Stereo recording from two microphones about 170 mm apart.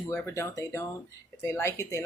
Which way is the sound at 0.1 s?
15° left (ahead or behind).